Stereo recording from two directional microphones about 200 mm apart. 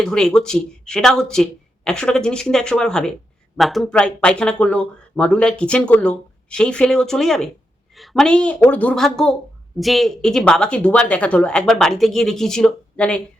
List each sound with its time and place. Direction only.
0.0 s speech: 5° left (ahead or behind)